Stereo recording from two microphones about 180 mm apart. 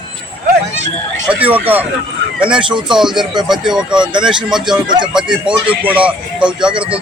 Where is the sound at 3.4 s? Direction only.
5° right (ahead or behind).